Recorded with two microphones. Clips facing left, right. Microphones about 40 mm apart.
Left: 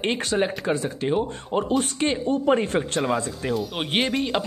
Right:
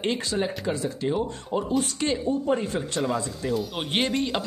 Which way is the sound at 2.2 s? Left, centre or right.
Left.